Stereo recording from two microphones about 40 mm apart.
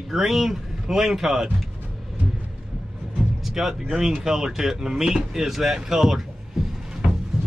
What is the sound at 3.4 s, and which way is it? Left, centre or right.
Speech, centre.